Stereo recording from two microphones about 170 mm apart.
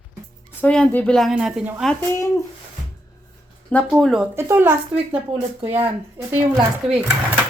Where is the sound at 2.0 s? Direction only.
15° left (ahead or behind).